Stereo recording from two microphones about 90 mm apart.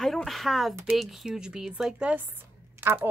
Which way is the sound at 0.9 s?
Centre (ahead or behind).